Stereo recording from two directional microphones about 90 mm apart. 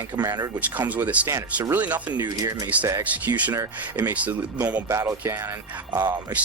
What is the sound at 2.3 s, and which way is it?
Speech, 45° right (ahead or behind).